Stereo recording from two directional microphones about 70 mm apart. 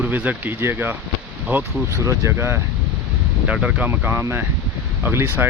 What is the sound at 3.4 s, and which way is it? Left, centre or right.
Speech, centre.